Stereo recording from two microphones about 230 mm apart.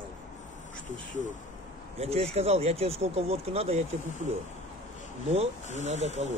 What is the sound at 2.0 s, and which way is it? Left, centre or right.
Speech, right.